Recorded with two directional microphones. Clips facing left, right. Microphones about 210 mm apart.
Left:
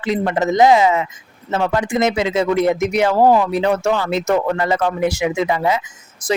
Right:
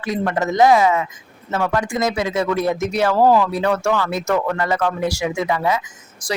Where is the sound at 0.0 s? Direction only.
20° left (ahead or behind).